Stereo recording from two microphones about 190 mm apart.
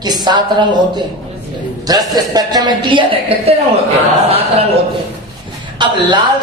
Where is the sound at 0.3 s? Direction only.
25° right (ahead or behind).